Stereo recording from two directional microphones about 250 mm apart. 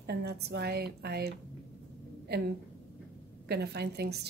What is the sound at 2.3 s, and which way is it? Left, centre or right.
A woman's voice, right.